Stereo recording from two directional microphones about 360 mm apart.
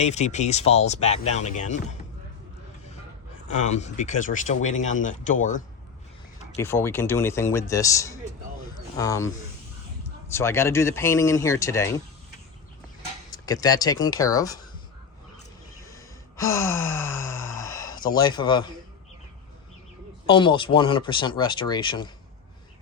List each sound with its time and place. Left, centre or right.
0.0 s speech: centre
3.5 s speech: centre
6.6 s speech: centre
13.3 s speech: centre
15.8 s sigh: centre
18.2 s speech: centre
20.2 s speech: centre